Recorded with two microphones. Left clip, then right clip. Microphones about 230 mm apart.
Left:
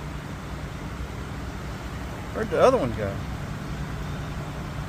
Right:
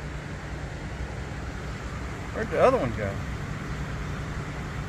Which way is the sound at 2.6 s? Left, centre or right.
Centre.